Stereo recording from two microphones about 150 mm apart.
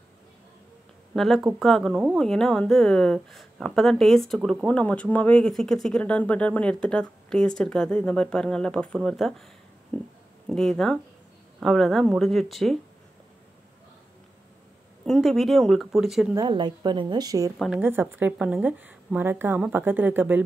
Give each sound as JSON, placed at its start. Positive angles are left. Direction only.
{"t": 1.1, "sound": "speech", "side_deg": 0}
{"t": 15.0, "sound": "speech", "side_deg": 0}
{"t": 16.3, "sound": "a woman's voice", "side_deg": -30}
{"t": 17.7, "sound": "speech", "side_deg": -15}